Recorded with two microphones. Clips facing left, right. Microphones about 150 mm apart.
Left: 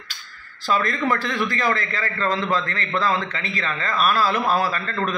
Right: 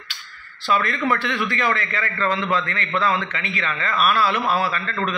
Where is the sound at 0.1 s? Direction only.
40° left (ahead or behind).